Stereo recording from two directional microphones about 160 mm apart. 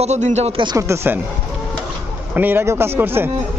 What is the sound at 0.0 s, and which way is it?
Speech, 45° right (ahead or behind).